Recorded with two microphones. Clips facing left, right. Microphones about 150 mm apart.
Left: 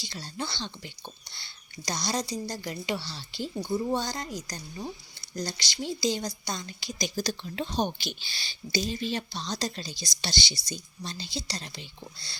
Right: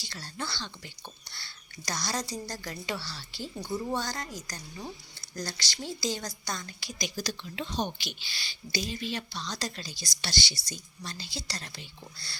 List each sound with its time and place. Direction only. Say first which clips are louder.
0.0 s speech: left 3 dB; 15° left (ahead or behind)
7.2 s speech: left 5 dB; 35° left (ahead or behind)
8.3 s speech: left 4 dB; 25° left (ahead or behind)